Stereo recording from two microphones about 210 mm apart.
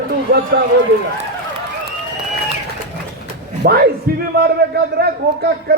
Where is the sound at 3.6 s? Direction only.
45° right (ahead or behind).